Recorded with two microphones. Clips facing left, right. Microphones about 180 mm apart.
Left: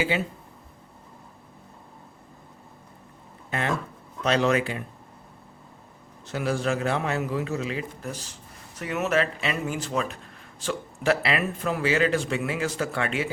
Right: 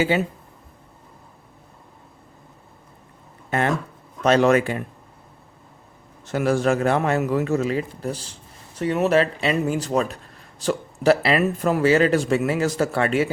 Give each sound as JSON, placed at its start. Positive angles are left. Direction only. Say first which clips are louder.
{"t": 4.2, "sound": "a man's voice", "louder": "right 6 dB", "side_deg": -50}
{"t": 6.2, "sound": "a man's voice", "louder": "right 6 dB", "side_deg": -50}